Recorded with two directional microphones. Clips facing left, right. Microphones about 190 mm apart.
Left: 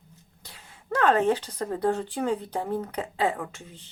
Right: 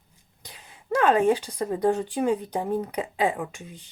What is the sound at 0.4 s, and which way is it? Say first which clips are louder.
Speech: right 3 dB; 15° right (ahead or behind).